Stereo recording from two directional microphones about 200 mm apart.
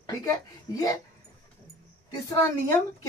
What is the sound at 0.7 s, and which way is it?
Speech, 20° left (ahead or behind).